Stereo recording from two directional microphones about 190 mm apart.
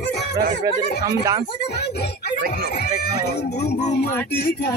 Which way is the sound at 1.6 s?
60° left (ahead or behind).